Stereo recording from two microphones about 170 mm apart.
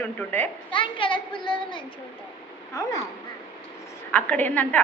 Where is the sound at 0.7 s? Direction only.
30° left (ahead or behind).